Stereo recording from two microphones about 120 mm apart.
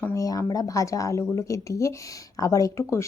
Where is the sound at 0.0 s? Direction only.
25° left (ahead or behind).